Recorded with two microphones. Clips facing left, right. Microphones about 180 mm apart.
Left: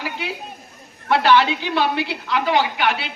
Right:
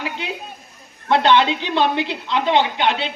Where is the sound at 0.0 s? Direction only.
20° right (ahead or behind).